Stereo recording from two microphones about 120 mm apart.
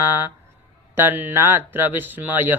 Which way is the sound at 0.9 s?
15° right (ahead or behind).